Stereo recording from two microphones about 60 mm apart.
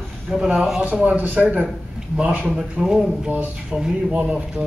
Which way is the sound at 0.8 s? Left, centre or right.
Right.